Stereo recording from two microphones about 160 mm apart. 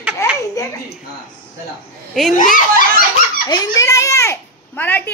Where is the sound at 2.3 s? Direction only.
55° left (ahead or behind).